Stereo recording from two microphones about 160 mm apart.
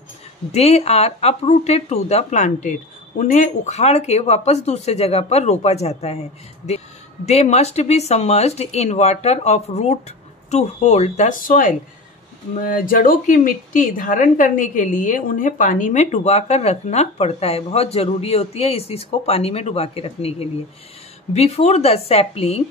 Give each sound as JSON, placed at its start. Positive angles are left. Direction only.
{"t": 0.5, "sound": "a woman's voice", "side_deg": 40}
{"t": 7.2, "sound": "a woman's voice", "side_deg": 45}